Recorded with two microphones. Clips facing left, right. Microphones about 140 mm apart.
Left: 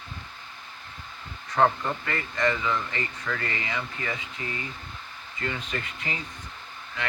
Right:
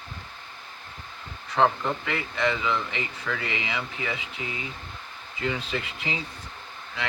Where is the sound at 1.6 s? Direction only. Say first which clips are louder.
Even; 5° right (ahead or behind).